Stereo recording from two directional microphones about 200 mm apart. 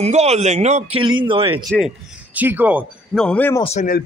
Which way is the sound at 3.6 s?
35° left (ahead or behind).